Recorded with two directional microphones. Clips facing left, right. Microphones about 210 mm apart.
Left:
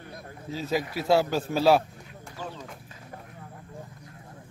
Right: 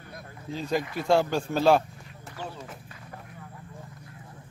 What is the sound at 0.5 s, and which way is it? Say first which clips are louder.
Speech: even; 5° left (ahead or behind).